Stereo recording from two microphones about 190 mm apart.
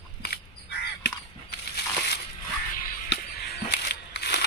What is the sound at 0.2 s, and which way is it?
Crow, 60° left (ahead or behind).